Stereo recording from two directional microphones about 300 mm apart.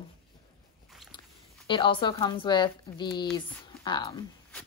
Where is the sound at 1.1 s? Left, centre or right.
Centre.